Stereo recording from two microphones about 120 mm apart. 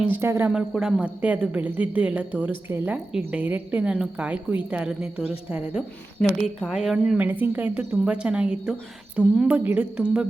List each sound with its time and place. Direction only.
0.1 s a woman's voice: 20° right (ahead or behind)
0.5 s a woman's voice: 5° right (ahead or behind)